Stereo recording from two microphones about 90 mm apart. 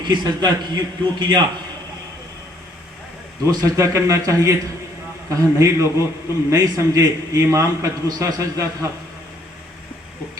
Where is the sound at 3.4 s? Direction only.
40° right (ahead or behind).